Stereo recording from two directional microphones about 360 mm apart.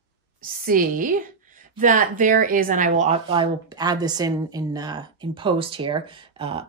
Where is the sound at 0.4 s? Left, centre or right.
Right.